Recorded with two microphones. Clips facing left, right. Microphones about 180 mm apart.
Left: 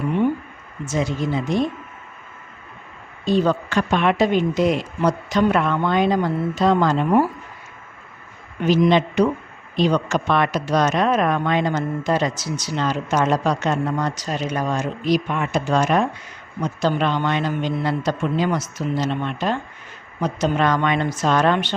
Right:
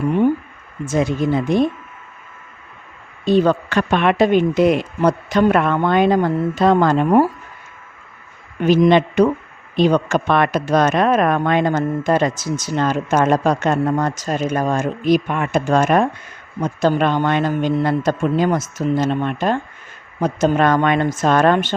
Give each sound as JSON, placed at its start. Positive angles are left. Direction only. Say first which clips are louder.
{"t": 0.9, "sound": "speech", "louder": "right 5 dB", "side_deg": -55}
{"t": 3.2, "sound": "speech", "louder": "right 4 dB", "side_deg": -60}
{"t": 8.6, "sound": "speech", "louder": "right 4 dB", "side_deg": -55}